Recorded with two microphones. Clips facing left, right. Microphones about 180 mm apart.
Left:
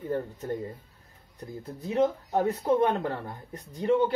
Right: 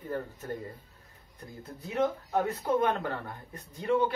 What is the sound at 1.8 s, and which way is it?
Speech, 25° left (ahead or behind).